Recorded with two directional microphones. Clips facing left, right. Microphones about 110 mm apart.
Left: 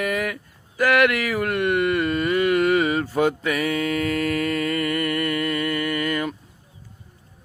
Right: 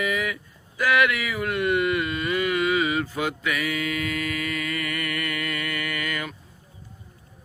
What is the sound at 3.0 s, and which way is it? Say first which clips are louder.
Mantra: left 6 dB; 40° left (ahead or behind).